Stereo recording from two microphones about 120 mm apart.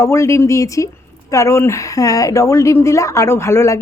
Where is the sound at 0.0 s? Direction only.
25° left (ahead or behind).